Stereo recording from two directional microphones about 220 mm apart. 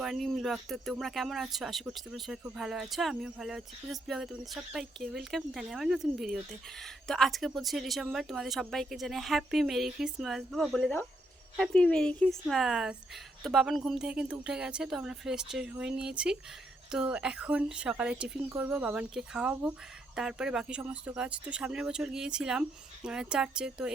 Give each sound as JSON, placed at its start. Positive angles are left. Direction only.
{"t": 0.0, "sound": "speech", "side_deg": 0}